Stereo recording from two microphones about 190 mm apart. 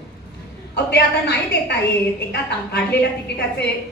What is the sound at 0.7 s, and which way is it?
A woman's voice, 60° left (ahead or behind).